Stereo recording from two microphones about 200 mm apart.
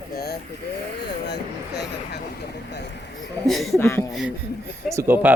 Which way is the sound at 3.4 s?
Centre (ahead or behind).